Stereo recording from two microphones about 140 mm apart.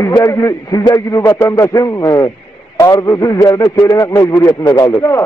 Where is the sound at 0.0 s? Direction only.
20° left (ahead or behind).